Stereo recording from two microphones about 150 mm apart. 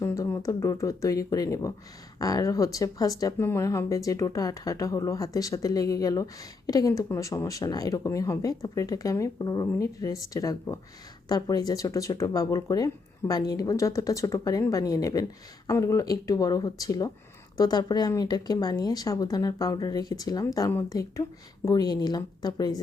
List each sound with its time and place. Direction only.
0.0 s speech: 20° left (ahead or behind)